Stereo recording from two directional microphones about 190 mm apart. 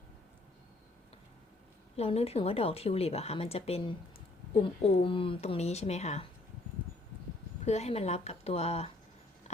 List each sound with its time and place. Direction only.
2.0 s a woman's voice: 30° left (ahead or behind)
7.6 s a woman's voice: 35° left (ahead or behind)